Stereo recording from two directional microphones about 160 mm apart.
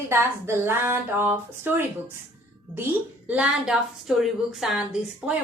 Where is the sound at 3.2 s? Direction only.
10° right (ahead or behind).